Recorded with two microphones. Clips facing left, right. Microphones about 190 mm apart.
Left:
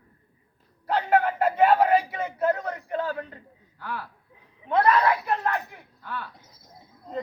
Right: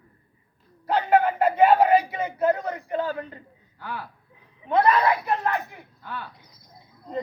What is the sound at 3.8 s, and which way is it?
Speech, centre (ahead or behind).